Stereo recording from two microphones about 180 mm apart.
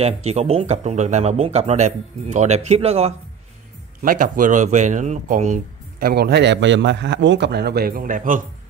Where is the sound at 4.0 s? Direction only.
50° right (ahead or behind).